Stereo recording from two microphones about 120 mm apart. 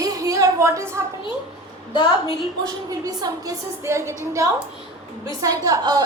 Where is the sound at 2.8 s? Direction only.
30° right (ahead or behind).